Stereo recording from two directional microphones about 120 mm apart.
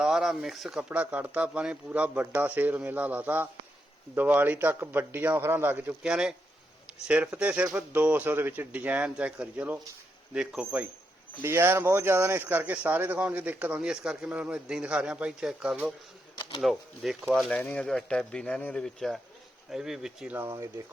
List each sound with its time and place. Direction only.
0.0 s speech: 5° right (ahead or behind)
7.3 s speech: 10° right (ahead or behind)
11.4 s speech: 20° right (ahead or behind); by 17.2 s centre (ahead or behind)
17.5 s speech: 10° left (ahead or behind); by 20.3 s 5° right (ahead or behind)
20.3 s speech: 20° right (ahead or behind)